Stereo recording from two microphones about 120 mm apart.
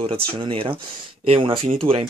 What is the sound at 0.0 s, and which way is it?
Speech, 50° right (ahead or behind).